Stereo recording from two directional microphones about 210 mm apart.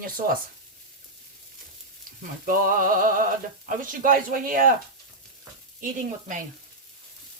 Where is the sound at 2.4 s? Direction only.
40° right (ahead or behind).